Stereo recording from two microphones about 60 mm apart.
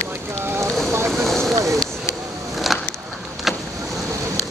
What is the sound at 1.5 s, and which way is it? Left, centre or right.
Vehicle, right.